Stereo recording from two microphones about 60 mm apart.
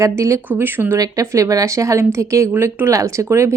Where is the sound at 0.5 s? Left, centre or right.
Right.